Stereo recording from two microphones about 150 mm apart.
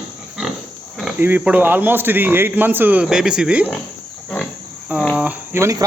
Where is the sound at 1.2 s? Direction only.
10° right (ahead or behind).